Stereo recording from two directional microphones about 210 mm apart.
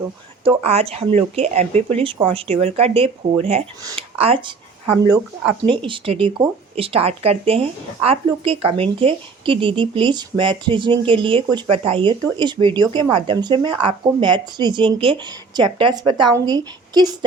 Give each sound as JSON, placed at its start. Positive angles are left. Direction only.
{"t": 0.4, "sound": "speech", "side_deg": -30}
{"t": 5.6, "sound": "speech", "side_deg": -25}